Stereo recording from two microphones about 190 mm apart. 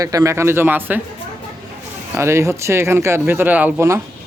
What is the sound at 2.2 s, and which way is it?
Speech, 15° right (ahead or behind).